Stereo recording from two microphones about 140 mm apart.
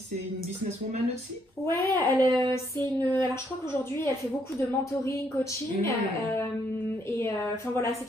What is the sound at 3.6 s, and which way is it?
A woman's voice, 20° left (ahead or behind).